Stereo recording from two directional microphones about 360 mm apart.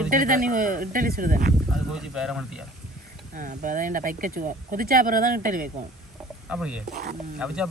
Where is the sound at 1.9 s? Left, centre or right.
Centre.